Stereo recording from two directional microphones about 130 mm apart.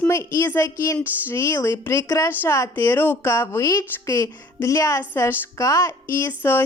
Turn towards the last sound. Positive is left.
turn(degrees=15)  # may be behind; listen again after turning